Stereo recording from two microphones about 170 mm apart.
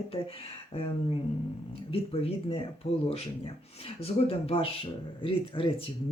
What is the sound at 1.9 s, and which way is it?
Speech, 35° left (ahead or behind).